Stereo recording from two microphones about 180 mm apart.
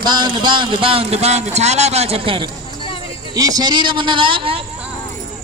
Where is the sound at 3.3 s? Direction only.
20° right (ahead or behind).